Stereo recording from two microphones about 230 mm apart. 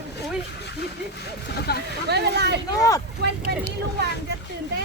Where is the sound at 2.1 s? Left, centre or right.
Right.